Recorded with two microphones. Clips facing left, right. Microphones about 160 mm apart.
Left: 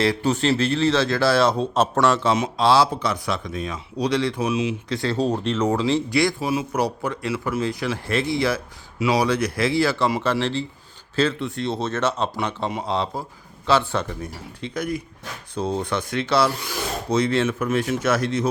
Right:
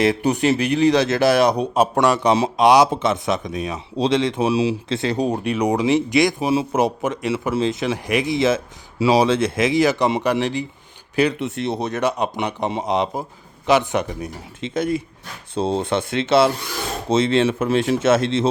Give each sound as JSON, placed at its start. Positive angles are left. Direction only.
{"t": 0.0, "sound": "speech", "side_deg": -15}